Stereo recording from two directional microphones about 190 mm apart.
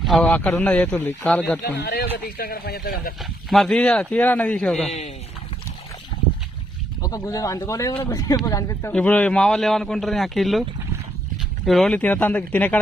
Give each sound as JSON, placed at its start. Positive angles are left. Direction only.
{"t": 0.0, "sound": "speech", "side_deg": 0}
{"t": 1.6, "sound": "speech", "side_deg": 60}
{"t": 3.5, "sound": "a man's voice", "side_deg": 0}
{"t": 4.9, "sound": "speech", "side_deg": 35}
{"t": 7.0, "sound": "speech", "side_deg": 20}
{"t": 8.9, "sound": "a man's voice", "side_deg": 5}